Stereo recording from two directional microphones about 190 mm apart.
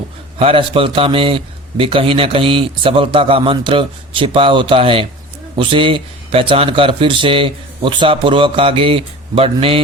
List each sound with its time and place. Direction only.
0.3 s a man's voice: 30° right (ahead or behind)